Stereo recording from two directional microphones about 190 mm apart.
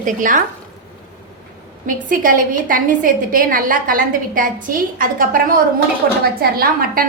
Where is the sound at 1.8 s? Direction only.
45° right (ahead or behind).